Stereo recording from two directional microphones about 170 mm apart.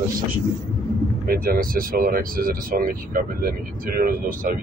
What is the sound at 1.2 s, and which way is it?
Speech, 60° right (ahead or behind).